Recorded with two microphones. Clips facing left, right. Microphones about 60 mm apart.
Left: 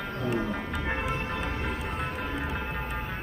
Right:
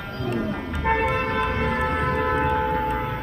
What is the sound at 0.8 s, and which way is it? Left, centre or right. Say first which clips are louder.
Music: right 13 dB; right.